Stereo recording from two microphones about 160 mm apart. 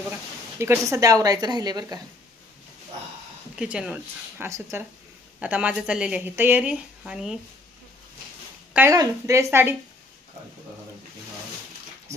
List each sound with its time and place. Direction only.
0.6 s speech: 15° right (ahead or behind)
3.5 s speech: 5° right (ahead or behind)
8.7 s speech: 20° right (ahead or behind)